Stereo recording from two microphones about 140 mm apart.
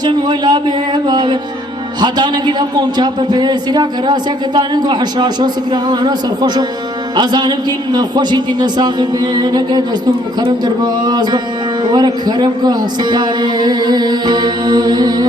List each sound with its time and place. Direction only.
0.0 s a man's voice: 30° right (ahead or behind)
11.0 s a man's voice: 30° right (ahead or behind)